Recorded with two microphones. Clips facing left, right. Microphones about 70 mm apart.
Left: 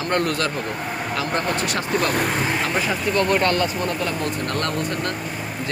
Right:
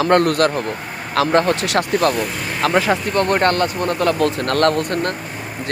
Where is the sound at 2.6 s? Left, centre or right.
Right.